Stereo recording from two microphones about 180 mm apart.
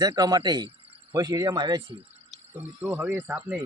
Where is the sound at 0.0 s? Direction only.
20° right (ahead or behind).